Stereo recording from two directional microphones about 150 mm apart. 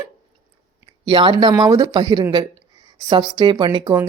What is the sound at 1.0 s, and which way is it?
Speech, 35° right (ahead or behind).